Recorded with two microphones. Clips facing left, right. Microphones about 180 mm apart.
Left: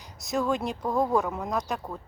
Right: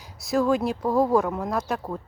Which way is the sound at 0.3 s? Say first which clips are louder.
Right 5 dB; centre (ahead or behind).